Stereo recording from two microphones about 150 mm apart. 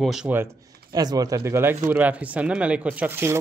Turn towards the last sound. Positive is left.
turn(degrees=-15)  # may be behind; listen again after turning